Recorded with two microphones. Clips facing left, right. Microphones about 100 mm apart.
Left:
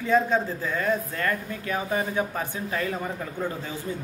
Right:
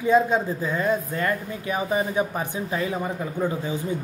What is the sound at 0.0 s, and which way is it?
Speech, 15° right (ahead or behind).